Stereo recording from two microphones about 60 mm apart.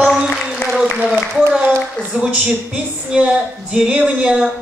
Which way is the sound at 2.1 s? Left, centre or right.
Centre.